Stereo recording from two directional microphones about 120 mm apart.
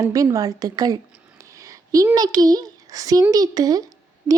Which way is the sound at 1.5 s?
25° right (ahead or behind).